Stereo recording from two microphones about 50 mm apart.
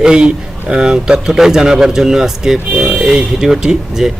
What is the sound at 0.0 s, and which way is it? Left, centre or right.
Speech, centre.